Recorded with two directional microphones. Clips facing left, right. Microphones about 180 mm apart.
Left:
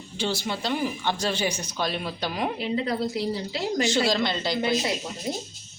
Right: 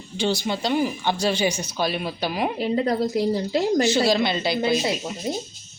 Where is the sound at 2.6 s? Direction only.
45° right (ahead or behind).